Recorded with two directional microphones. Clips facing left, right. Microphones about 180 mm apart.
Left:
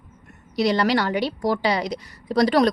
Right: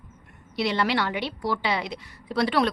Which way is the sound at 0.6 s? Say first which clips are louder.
Left 5 dB; 40° left (ahead or behind).